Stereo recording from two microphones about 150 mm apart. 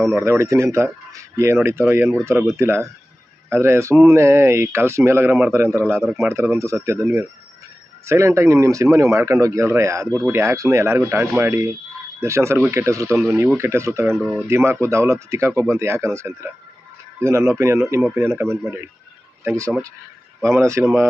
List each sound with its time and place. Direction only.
0.2 s speech: 20° right (ahead or behind)
6.0 s speech: centre (ahead or behind)
6.2 s speech: 15° right (ahead or behind)